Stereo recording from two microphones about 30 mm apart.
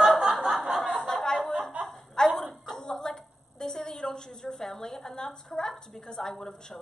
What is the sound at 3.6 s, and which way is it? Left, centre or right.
A woman's voice, centre.